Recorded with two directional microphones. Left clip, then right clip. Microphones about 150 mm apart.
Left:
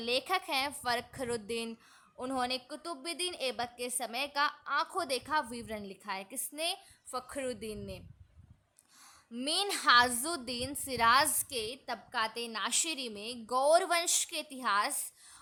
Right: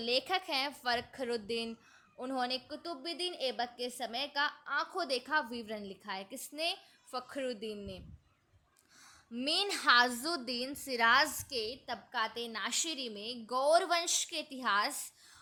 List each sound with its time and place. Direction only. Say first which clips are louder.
0.0 s a woman's voice: left 1 dB; 10° left (ahead or behind)
9.3 s a woman's voice: even; 10° left (ahead or behind)